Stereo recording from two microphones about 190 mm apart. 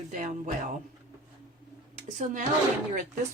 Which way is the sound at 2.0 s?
40° right (ahead or behind).